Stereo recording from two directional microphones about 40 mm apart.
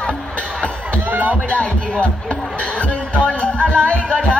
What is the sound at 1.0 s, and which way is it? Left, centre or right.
Music, right.